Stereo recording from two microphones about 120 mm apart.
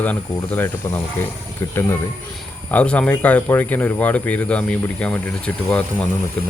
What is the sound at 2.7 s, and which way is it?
Speech, 10° left (ahead or behind).